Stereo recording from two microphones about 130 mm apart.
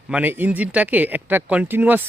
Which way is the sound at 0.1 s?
15° right (ahead or behind).